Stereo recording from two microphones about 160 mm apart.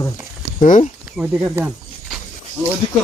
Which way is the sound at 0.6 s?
55° left (ahead or behind).